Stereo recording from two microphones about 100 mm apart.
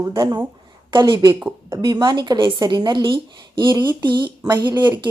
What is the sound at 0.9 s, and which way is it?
A woman's voice, 50° right (ahead or behind).